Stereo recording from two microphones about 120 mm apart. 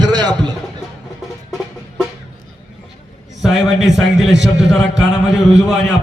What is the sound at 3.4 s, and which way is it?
A man's voice, 5° right (ahead or behind).